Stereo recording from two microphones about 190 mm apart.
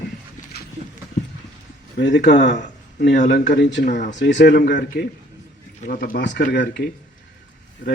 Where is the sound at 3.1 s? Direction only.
45° left (ahead or behind); by 3.8 s 60° left (ahead or behind).